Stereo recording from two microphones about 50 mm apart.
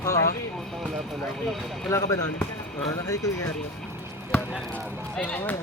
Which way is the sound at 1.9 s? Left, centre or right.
Left.